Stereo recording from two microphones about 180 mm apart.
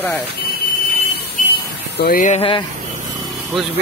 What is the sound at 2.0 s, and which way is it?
Speech, 50° left (ahead or behind).